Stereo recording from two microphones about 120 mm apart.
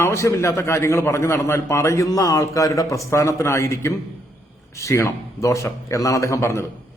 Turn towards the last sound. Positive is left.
turn(degrees=25)  # may be behind; listen again after turning